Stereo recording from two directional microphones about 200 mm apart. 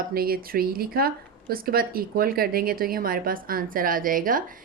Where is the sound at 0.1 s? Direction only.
50° right (ahead or behind).